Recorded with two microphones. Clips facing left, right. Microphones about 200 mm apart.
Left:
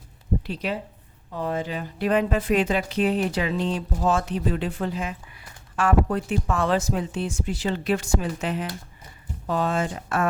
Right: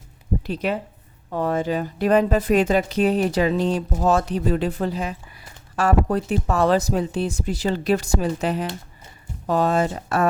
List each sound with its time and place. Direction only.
0.4 s a woman's voice: 50° right (ahead or behind)